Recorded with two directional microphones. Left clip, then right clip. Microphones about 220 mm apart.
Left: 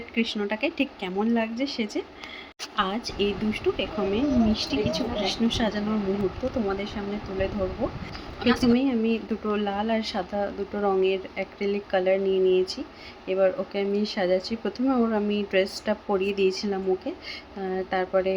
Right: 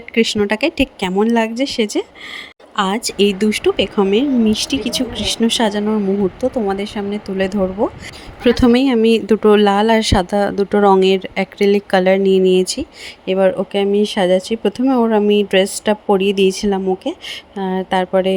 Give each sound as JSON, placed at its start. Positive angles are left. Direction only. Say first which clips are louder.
{"t": 0.1, "sound": "speech", "louder": "right 13 dB", "side_deg": -50}
{"t": 8.7, "sound": "speech", "louder": "right 12 dB", "side_deg": -50}